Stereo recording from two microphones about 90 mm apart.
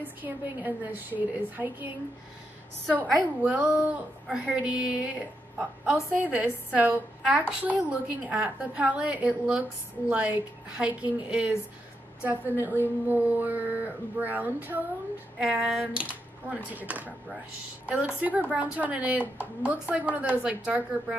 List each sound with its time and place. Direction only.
0.2 s speech: 20° right (ahead or behind)
3.4 s a woman's voice: 15° right (ahead or behind)
15.3 s a woman's voice: 10° right (ahead or behind)